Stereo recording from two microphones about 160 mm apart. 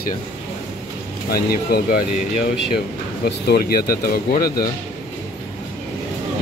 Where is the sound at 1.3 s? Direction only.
70° left (ahead or behind).